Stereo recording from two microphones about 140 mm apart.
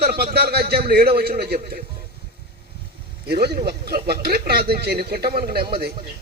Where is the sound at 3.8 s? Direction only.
90° right.